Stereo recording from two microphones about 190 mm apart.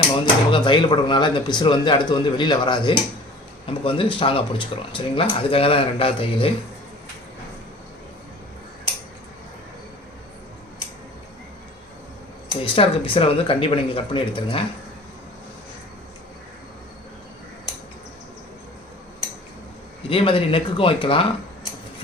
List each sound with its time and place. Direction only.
0.5 s speech: 25° left (ahead or behind)
12.6 s speech: 30° left (ahead or behind)
20.1 s speech: 30° left (ahead or behind)